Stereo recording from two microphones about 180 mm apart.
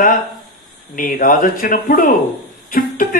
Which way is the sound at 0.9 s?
50° left (ahead or behind).